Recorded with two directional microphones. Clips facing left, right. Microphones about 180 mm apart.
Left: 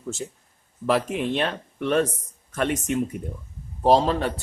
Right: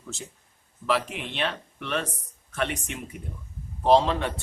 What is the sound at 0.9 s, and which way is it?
A man's voice, 45° left (ahead or behind).